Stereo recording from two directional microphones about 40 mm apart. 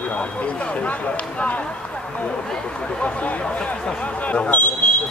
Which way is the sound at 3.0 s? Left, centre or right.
Left.